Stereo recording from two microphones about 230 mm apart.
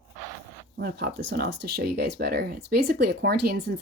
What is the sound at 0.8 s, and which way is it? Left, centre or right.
A woman's voice, right.